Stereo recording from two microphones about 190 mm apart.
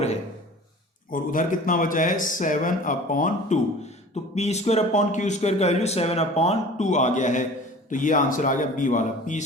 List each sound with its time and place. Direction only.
1.1 s a man's voice: 45° left (ahead or behind)